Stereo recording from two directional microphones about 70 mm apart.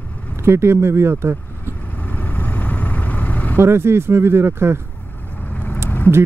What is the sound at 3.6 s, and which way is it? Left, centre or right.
Speech, right.